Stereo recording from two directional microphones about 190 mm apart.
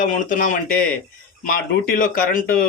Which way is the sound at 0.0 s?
45° left (ahead or behind).